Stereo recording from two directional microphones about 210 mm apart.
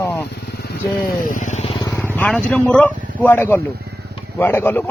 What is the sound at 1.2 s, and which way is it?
Vehicle, 35° left (ahead or behind).